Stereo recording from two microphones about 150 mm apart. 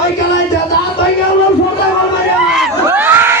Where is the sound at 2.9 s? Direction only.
15° right (ahead or behind).